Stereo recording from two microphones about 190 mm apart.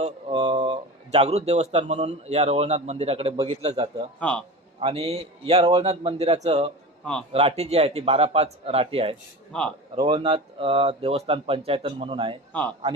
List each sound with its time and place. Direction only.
0.0 s speech: 25° right (ahead or behind)
4.2 s a man's voice: 5° left (ahead or behind)
4.8 s a man's voice: 30° right (ahead or behind)
7.0 s a man's voice: 5° left (ahead or behind)
7.3 s a man's voice: 35° right (ahead or behind)